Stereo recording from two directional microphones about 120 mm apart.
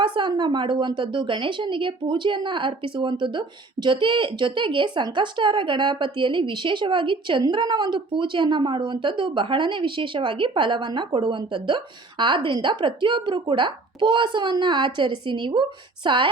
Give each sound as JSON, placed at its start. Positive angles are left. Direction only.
{"t": 0.0, "sound": "speech", "side_deg": -40}